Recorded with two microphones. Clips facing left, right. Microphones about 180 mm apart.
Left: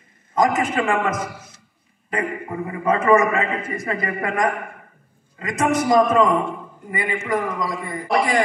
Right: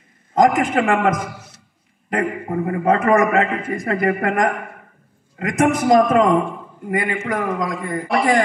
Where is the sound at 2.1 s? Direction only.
60° right (ahead or behind).